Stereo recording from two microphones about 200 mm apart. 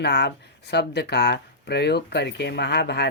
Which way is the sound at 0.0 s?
55° left (ahead or behind).